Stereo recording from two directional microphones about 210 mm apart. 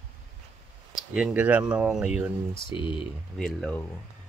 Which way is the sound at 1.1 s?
5° right (ahead or behind).